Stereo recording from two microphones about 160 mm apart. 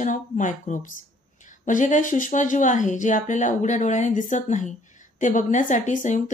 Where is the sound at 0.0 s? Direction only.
50° left (ahead or behind).